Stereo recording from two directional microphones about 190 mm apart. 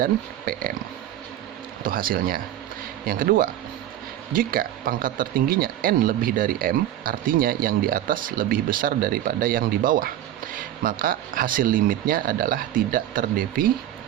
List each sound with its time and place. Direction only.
0.0 s speech: 50° right (ahead or behind)
1.8 s speech: 50° right (ahead or behind)